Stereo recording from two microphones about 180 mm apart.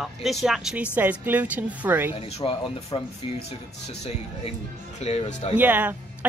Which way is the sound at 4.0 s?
35° left (ahead or behind).